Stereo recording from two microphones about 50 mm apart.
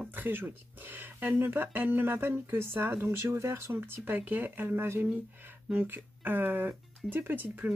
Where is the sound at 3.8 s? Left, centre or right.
Right.